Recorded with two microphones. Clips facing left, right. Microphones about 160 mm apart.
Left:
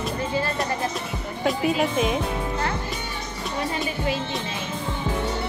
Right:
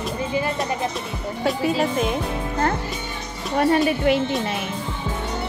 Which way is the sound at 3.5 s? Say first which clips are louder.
Right 10 dB; 60° right (ahead or behind).